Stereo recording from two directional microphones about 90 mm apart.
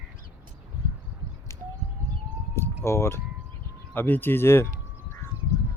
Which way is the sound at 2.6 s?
30° left (ahead or behind).